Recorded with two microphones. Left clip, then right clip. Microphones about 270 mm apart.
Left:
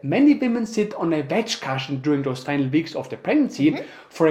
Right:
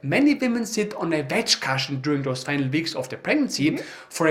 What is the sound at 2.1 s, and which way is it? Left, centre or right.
Speech, centre.